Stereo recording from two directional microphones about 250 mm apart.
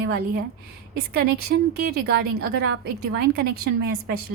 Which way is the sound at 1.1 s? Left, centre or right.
Right.